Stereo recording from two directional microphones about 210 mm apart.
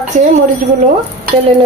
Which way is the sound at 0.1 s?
30° right (ahead or behind).